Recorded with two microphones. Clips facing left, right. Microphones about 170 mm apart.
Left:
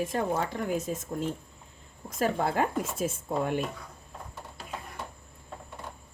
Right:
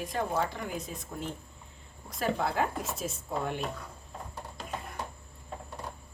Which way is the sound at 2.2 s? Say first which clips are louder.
Left 3 dB; 50° left (ahead or behind).